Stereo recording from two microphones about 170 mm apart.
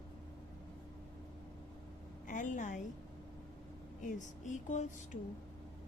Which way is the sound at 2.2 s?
50° left (ahead or behind).